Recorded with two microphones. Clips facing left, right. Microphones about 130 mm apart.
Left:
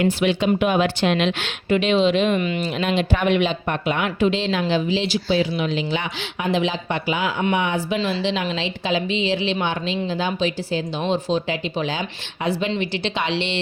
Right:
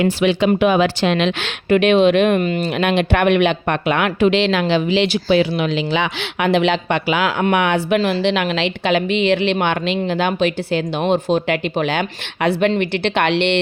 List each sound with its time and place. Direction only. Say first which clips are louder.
0.0 s a woman's voice: right 4 dB; 90° right; by 13.6 s 65° right (ahead or behind)